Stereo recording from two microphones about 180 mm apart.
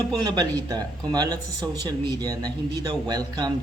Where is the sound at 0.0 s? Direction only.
20° right (ahead or behind).